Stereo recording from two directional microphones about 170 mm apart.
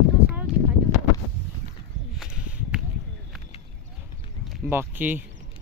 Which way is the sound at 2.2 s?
5° right (ahead or behind).